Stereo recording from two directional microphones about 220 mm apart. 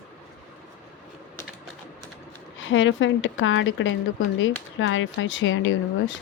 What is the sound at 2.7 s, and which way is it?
Speech, 60° left (ahead or behind).